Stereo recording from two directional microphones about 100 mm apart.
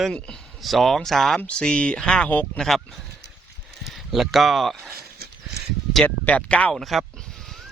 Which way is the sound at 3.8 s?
Centre (ahead or behind).